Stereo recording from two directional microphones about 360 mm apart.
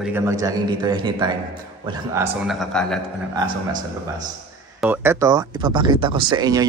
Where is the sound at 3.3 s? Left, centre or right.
Centre.